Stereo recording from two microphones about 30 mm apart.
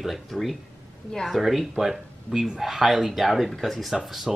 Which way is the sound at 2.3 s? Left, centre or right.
Right.